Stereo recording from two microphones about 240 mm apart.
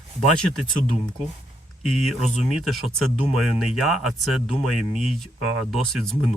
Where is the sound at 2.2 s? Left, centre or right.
Left.